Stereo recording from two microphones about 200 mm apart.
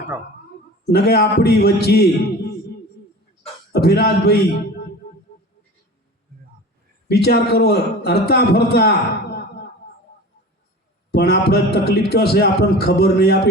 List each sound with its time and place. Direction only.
0.9 s a man's voice: 55° left (ahead or behind)
3.7 s vocal music: 55° left (ahead or behind)
7.1 s a man's voice: 55° left (ahead or behind)
11.1 s a man's voice: 55° left (ahead or behind)